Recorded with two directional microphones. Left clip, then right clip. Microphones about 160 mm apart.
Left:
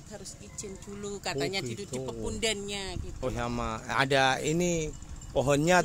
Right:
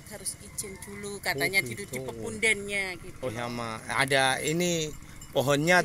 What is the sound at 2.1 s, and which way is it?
Speech, 85° left.